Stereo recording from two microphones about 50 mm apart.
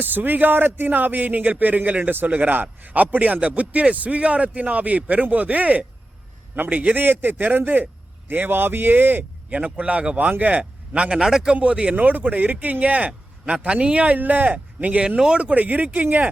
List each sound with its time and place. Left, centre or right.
0.0 s a man's voice: right
9.5 s speech: right; by 11.5 s centre
11.5 s speech: right
14.2 s a man's voice: right